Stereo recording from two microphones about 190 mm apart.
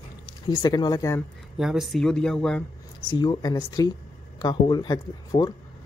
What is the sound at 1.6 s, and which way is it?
Speech, centre (ahead or behind).